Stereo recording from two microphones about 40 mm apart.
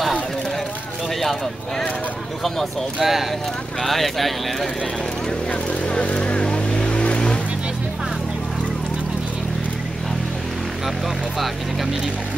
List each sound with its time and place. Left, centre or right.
3.0 s speech: centre
3.8 s speech: centre
5.5 s vehicle: left
11.3 s speech: centre